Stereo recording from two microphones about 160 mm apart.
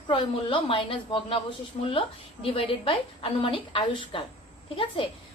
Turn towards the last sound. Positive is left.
turn(degrees=35)  # may be behind; listen again after turning